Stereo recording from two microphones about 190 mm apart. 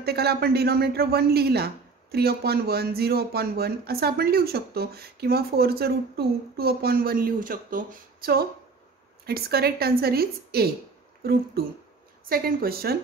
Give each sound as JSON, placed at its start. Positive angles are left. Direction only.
{"t": 0.0, "sound": "speech", "side_deg": -55}
{"t": 12.3, "sound": "a woman's voice", "side_deg": -50}